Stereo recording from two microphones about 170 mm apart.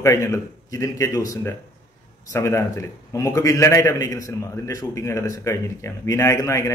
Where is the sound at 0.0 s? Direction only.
15° left (ahead or behind).